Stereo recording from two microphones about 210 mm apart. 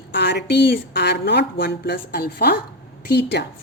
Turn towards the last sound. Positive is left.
turn(degrees=50)  # may be behind; listen again after turning